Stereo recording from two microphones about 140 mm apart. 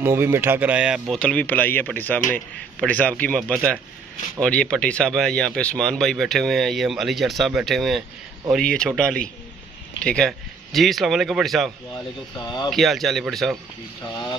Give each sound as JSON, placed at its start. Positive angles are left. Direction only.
{"t": 0.0, "sound": "speech", "side_deg": -15}
{"t": 1.2, "sound": "speech", "side_deg": 10}
{"t": 12.4, "sound": "speech", "side_deg": 30}
{"t": 12.6, "sound": "speech", "side_deg": 0}